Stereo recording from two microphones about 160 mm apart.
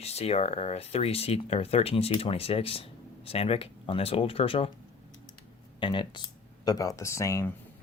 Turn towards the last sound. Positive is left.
turn(degrees=20)  # may be behind; listen again after turning